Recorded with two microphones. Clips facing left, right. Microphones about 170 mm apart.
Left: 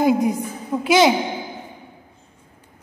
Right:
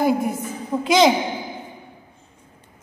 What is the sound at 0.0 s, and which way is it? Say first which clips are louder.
Speech: left 2 dB; 15° left (ahead or behind).